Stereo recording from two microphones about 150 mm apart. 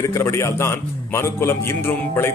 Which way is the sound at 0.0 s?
20° left (ahead or behind).